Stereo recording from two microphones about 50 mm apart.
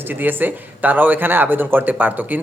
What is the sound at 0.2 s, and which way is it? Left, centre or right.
Speech, right.